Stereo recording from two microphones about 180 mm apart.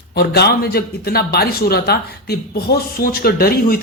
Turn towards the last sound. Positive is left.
turn(degrees=55)  # may be behind; listen again after turning